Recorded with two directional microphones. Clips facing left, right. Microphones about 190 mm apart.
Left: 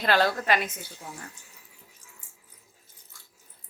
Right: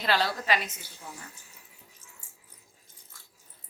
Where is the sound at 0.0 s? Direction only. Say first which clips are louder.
Left 4 dB; 55° left (ahead or behind).